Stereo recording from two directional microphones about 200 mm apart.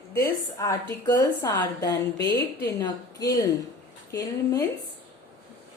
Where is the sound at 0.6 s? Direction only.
15° left (ahead or behind).